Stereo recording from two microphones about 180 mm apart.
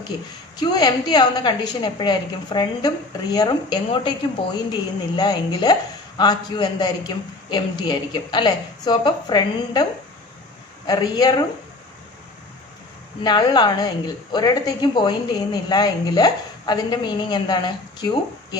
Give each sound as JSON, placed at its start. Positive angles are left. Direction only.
{"t": 0.6, "sound": "a woman's voice", "side_deg": 20}
{"t": 10.8, "sound": "a woman's voice", "side_deg": 20}
{"t": 13.2, "sound": "a woman's voice", "side_deg": 25}